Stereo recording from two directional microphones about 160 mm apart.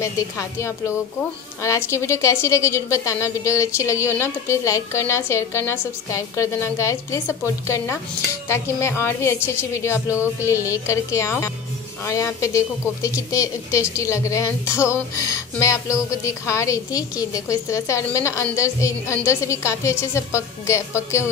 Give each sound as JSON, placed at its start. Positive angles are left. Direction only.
{"t": 0.0, "sound": "a woman's voice", "side_deg": 20}